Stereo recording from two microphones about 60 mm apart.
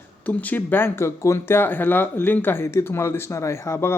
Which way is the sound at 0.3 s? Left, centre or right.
Left.